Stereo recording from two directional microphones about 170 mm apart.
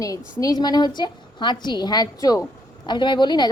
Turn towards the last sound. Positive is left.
turn(degrees=25)  # may be behind; listen again after turning